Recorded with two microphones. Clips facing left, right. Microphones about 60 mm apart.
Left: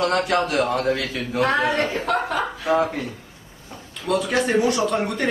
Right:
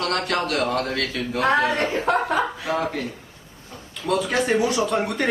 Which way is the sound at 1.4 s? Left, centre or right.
Right.